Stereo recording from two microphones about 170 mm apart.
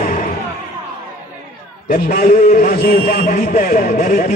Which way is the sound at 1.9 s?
55° left (ahead or behind).